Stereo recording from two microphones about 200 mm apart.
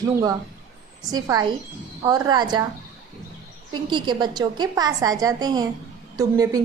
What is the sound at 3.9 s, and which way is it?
A woman's voice, 20° right (ahead or behind).